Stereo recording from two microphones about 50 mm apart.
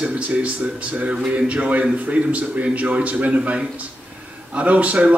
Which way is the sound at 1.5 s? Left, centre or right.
Right.